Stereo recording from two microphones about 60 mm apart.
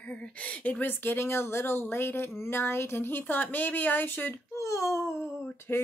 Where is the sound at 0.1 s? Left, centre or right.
Left.